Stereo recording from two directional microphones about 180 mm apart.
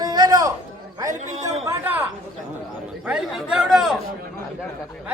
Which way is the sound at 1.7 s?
10° right (ahead or behind).